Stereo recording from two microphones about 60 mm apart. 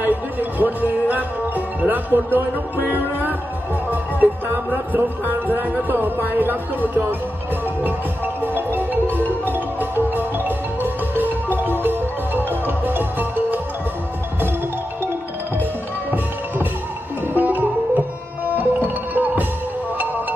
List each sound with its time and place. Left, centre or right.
0.0 s music: right
1.8 s speech: right
3.9 s music: right
8.7 s music: right
17.3 s sitar: right
18.6 s music: right